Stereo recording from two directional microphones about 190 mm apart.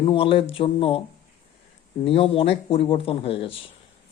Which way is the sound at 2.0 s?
30° left (ahead or behind).